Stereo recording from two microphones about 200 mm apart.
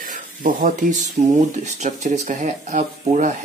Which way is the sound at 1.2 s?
45° right (ahead or behind).